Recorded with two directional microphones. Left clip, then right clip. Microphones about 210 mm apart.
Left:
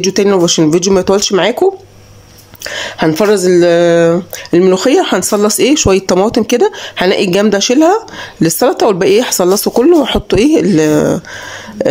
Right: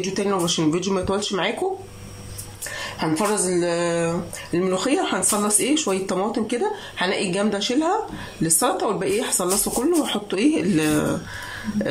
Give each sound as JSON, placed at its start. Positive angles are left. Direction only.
{"t": 0.0, "sound": "speech", "side_deg": 45}
{"t": 2.7, "sound": "speech", "side_deg": 40}